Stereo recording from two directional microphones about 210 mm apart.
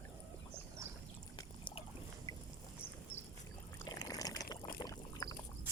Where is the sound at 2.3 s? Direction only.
15° left (ahead or behind).